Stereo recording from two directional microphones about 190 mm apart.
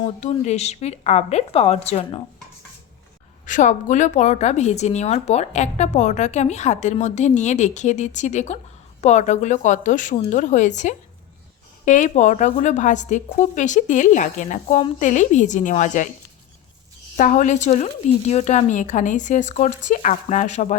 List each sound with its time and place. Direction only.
0.2 s a woman's voice: 35° left (ahead or behind)
3.4 s a woman's voice: 40° left (ahead or behind)
17.2 s a woman's voice: 40° left (ahead or behind)